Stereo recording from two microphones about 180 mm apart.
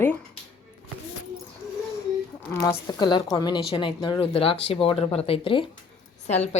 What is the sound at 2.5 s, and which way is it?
Speech, 15° left (ahead or behind).